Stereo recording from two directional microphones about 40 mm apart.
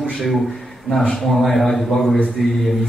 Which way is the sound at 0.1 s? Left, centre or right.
Centre.